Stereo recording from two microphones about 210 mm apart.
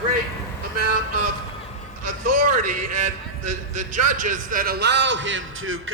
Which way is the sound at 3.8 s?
40° right (ahead or behind).